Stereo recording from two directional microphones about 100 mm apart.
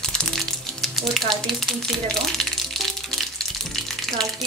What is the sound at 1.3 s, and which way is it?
Speech, 5° left (ahead or behind).